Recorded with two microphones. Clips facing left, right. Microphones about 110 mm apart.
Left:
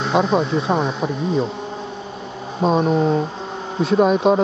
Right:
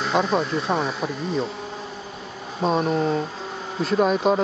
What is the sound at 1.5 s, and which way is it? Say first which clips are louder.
Bee: left 4 dB; 25° left (ahead or behind).